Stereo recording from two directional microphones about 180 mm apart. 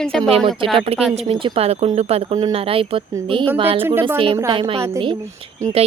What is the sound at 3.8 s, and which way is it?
Speech, 10° right (ahead or behind).